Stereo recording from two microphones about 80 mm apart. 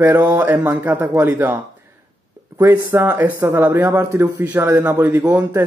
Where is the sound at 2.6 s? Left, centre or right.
Right.